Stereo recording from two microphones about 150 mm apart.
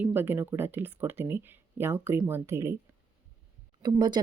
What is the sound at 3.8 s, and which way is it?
Speech, 30° right (ahead or behind).